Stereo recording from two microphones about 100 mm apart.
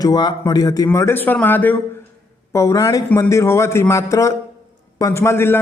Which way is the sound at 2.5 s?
30° left (ahead or behind).